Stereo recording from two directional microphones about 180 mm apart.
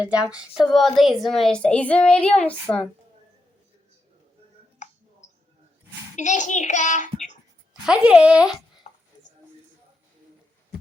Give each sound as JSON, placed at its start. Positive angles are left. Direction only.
{"t": 0.0, "sound": "female singing", "side_deg": -5}
{"t": 0.7, "sound": "speech", "side_deg": 0}
{"t": 4.8, "sound": "clicking", "side_deg": 40}
{"t": 5.2, "sound": "cricket", "side_deg": 40}
{"t": 6.1, "sound": "a child's voice", "side_deg": 40}
{"t": 7.7, "sound": "speech", "side_deg": -5}
{"t": 8.9, "sound": "chopping", "side_deg": 40}